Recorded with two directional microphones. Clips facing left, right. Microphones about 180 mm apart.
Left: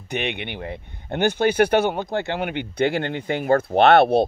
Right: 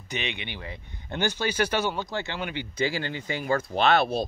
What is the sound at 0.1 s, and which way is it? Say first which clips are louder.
Speech: left 7 dB; 60° left (ahead or behind).